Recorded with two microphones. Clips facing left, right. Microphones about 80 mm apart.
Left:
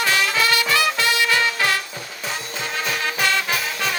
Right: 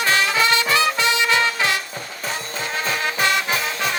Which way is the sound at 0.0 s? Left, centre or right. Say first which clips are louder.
Right 1 dB; right.